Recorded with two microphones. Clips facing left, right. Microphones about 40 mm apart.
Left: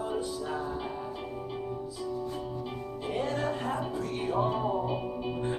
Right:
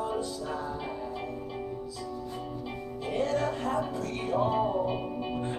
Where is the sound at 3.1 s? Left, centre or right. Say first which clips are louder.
Right 2 dB; left.